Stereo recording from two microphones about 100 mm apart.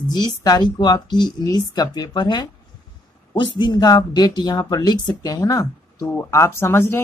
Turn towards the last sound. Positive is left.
turn(degrees=25)  # may be behind; listen again after turning